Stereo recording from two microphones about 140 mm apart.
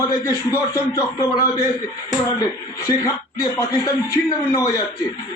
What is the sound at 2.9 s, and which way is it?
A man's voice, 25° left (ahead or behind).